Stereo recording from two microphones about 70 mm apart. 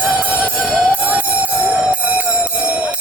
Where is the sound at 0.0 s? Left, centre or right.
Centre.